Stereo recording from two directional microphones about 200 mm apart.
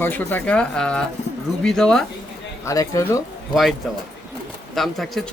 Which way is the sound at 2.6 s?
15° left (ahead or behind).